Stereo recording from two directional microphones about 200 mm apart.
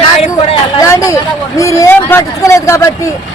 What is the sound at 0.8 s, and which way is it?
A man's voice, 15° left (ahead or behind).